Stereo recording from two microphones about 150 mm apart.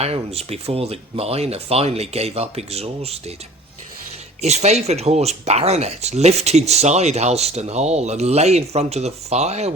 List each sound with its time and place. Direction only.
0.0 s speech: 45° right (ahead or behind)
4.4 s speech: 45° right (ahead or behind)